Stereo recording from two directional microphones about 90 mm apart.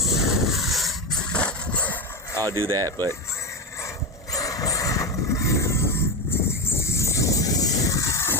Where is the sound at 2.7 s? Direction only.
40° right (ahead or behind).